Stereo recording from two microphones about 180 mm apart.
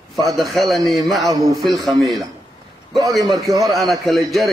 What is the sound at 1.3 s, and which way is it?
Speech, 20° right (ahead or behind).